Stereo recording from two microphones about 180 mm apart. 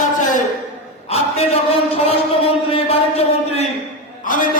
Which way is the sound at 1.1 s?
35° left (ahead or behind).